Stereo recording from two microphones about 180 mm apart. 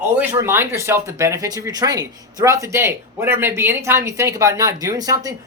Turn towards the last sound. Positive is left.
turn(degrees=-20)  # may be behind; listen again after turning